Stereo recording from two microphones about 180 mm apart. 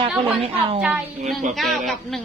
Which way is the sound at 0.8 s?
5° right (ahead or behind).